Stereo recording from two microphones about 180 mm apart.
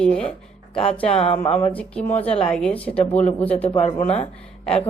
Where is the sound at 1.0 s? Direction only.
35° left (ahead or behind).